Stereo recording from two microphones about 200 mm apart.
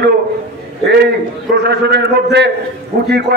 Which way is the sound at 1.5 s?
55° right (ahead or behind).